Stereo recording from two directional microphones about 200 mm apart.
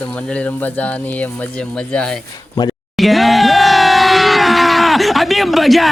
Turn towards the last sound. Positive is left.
turn(degrees=0)  # may be behind; listen again after turning